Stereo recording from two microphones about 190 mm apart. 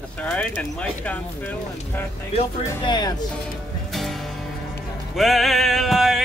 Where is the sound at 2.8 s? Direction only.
20° left (ahead or behind).